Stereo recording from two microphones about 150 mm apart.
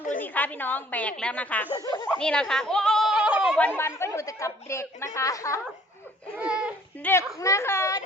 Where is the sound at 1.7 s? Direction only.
30° left (ahead or behind).